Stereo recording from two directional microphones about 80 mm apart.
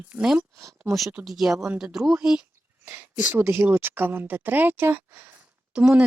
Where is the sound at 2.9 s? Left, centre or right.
Right.